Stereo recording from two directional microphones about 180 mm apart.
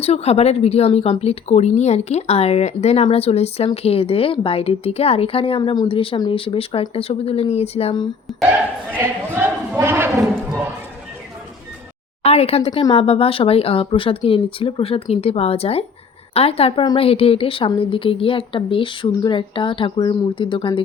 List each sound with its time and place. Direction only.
0.0 s speech: 35° left (ahead or behind)
8.3 s speech: centre (ahead or behind)
8.9 s speech: 15° right (ahead or behind)
12.2 s a woman's voice: 35° left (ahead or behind)